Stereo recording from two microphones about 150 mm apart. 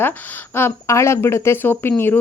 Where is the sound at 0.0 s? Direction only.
10° left (ahead or behind).